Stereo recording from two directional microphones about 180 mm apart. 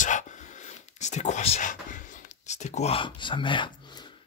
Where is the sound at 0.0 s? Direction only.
45° left (ahead or behind).